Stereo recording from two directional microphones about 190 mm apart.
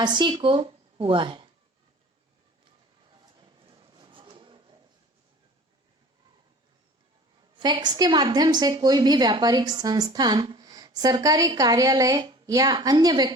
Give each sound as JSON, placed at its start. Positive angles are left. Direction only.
{"t": 0.0, "sound": "a woman's voice", "side_deg": -25}
{"t": 3.4, "sound": "a sound", "side_deg": -25}
{"t": 7.6, "sound": "a woman's voice", "side_deg": -20}